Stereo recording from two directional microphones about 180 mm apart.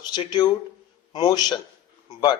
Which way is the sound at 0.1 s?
25° left (ahead or behind).